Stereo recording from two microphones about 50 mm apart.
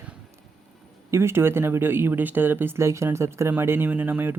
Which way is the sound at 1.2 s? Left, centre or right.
Right.